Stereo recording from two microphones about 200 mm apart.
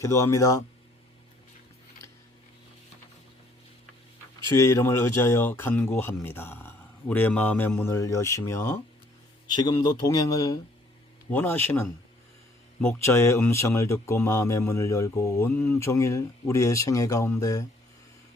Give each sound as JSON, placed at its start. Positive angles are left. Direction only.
{"t": 0.0, "sound": "speech", "side_deg": 15}
{"t": 4.5, "sound": "speech", "side_deg": 15}